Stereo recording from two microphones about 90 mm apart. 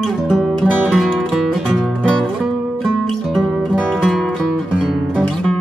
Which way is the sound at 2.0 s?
10° left (ahead or behind).